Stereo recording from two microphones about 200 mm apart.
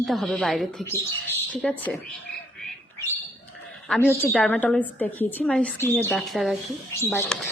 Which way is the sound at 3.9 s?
10° left (ahead or behind).